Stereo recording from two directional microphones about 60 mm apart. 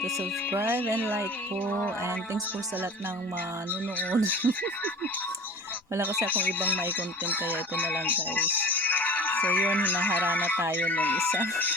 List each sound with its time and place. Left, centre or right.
0.5 s speech: right
3.9 s speech: left
6.3 s speech: left